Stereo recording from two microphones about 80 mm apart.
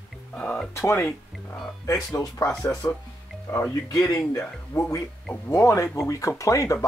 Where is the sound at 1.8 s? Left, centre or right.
Left.